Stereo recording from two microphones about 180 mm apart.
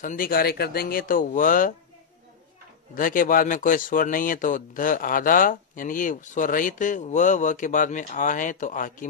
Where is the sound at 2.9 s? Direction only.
50° left (ahead or behind).